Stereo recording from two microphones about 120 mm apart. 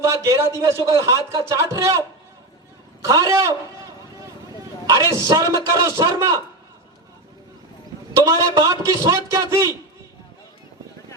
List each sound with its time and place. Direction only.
0.0 s speech: 25° right (ahead or behind)
4.9 s speech: 25° right (ahead or behind)
8.2 s speech: 25° right (ahead or behind)